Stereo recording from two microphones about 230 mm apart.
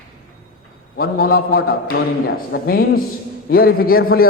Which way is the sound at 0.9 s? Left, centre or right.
Left.